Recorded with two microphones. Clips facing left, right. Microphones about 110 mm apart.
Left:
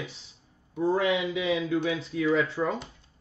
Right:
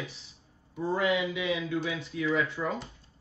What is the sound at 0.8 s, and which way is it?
A man's voice, 30° left (ahead or behind).